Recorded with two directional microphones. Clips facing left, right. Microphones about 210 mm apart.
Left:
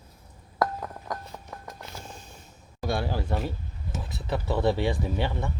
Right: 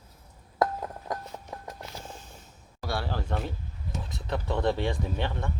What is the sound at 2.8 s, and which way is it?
Speech, 15° left (ahead or behind).